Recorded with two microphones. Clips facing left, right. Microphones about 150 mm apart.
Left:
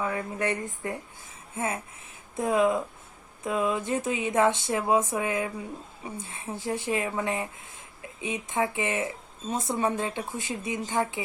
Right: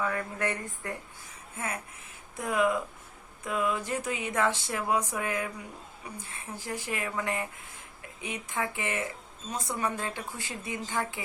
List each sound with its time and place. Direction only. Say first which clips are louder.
0.0 s speech: left 2 dB; 20° left (ahead or behind)